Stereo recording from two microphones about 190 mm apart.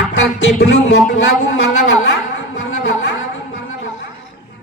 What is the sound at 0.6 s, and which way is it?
Speech, 75° left (ahead or behind).